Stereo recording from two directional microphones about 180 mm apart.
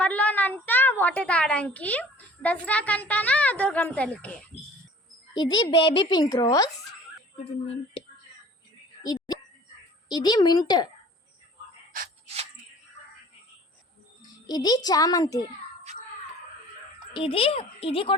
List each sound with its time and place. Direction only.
0.0 s a woman's voice: 10° left (ahead or behind)
5.3 s a woman's voice: 25° left (ahead or behind)
10.1 s a woman's voice: 25° left (ahead or behind)
14.2 s a child's voice: 25° left (ahead or behind)
17.2 s a child's voice: 30° left (ahead or behind)